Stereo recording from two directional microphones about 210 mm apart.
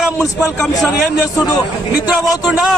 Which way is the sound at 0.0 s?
Centre (ahead or behind).